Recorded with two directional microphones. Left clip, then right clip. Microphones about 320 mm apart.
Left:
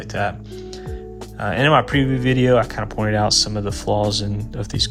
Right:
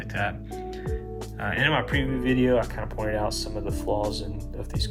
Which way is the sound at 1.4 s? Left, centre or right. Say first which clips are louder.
Left 8 dB; centre.